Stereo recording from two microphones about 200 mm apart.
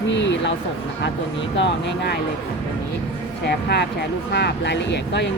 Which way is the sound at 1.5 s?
60° left (ahead or behind).